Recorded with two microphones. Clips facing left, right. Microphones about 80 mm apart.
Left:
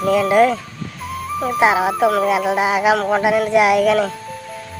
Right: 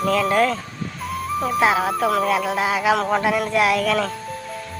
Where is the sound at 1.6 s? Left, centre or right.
Centre.